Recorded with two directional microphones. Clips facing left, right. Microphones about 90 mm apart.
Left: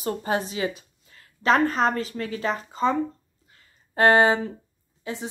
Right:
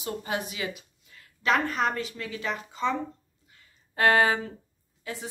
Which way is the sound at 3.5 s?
35° left (ahead or behind).